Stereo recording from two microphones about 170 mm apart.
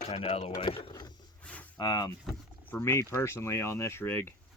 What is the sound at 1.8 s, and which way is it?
Speech, 20° left (ahead or behind).